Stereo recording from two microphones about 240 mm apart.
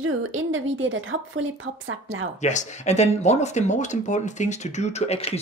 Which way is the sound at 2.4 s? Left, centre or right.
Left.